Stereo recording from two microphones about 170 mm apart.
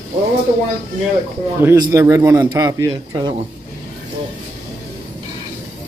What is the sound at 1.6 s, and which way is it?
A man's voice, 15° right (ahead or behind).